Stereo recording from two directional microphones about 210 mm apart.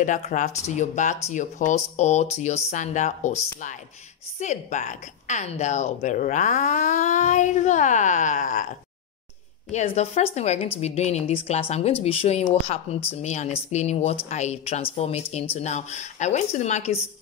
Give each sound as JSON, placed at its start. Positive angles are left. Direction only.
{"t": 0.0, "sound": "a woman's voice", "side_deg": 35}
{"t": 4.4, "sound": "a woman's voice", "side_deg": 35}